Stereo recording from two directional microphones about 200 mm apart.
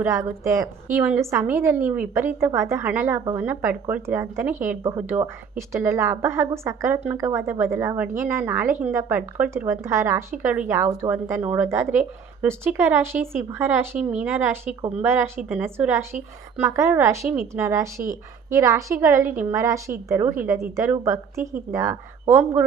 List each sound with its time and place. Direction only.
0.0 s a woman's voice: 15° right (ahead or behind)